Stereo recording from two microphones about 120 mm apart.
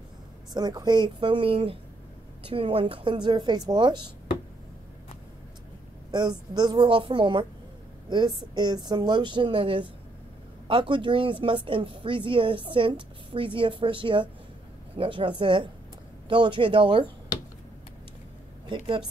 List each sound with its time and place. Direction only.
0.6 s a woman's voice: 35° right (ahead or behind)
6.1 s a woman's voice: 35° right (ahead or behind)